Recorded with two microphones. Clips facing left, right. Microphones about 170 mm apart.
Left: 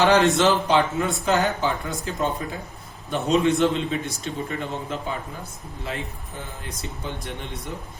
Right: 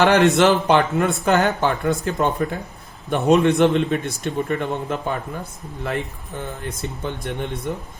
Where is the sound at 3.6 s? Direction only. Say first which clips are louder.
Right 5 dB; 65° right (ahead or behind).